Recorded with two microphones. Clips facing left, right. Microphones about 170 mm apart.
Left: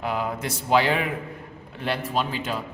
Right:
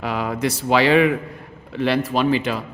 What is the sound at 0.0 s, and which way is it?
A man's voice, 90° right.